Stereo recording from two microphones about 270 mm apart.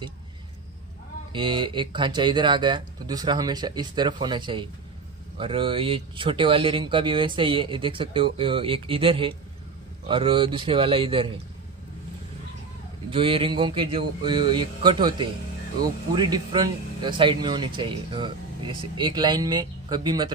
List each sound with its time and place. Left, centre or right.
1.3 s speech: centre
13.1 s speech: centre